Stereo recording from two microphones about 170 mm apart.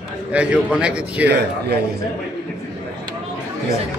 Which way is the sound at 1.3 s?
85° right.